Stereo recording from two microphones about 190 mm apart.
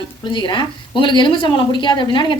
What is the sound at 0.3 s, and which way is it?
Speech, 25° left (ahead or behind).